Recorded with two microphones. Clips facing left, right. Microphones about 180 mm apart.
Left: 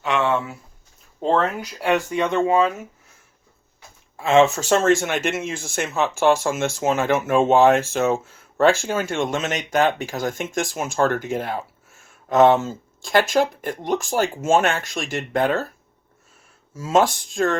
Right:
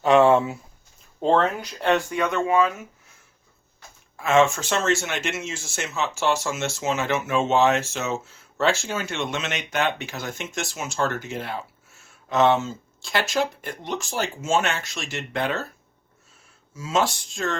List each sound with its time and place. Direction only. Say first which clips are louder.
0.0 s speech: right 6 dB; 35° right (ahead or behind)
1.2 s speech: even; centre (ahead or behind)
2.1 s speech: left 3 dB; 25° left (ahead or behind)
4.2 s speech: left 3 dB; 30° left (ahead or behind)
16.7 s speech: left 5 dB; 50° left (ahead or behind)